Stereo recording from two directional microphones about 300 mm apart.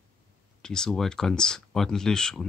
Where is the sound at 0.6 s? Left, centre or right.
Centre.